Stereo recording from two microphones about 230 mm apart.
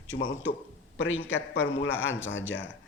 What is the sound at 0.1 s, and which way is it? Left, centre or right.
Speech, left.